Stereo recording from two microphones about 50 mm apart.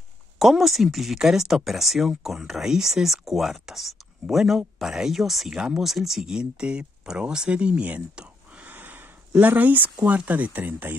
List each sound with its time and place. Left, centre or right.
0.4 s speech: centre
5.5 s speech: right
5.8 s speech: centre
6.3 s speech: centre
8.6 s a sound: right
9.4 s speech: right